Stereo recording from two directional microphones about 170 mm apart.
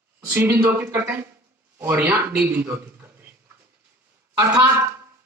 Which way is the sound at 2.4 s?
15° right (ahead or behind).